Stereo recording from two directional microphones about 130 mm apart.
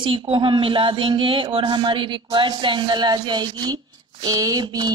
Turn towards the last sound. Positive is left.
turn(degrees=-30)  # may be behind; listen again after turning